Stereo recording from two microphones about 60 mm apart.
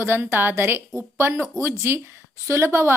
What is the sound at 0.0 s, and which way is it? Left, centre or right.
A woman's voice, right.